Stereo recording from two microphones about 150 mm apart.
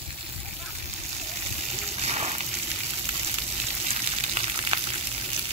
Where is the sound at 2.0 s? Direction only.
45° right (ahead or behind).